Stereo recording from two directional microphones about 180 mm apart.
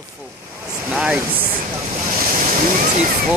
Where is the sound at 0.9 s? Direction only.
5° right (ahead or behind).